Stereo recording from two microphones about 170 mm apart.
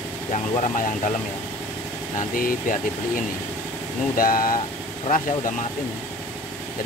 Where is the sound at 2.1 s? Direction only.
55° left (ahead or behind).